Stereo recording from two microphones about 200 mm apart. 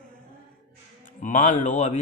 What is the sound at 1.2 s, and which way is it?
Speech, 40° left (ahead or behind).